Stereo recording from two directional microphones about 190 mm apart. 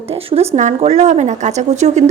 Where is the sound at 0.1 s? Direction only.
30° right (ahead or behind).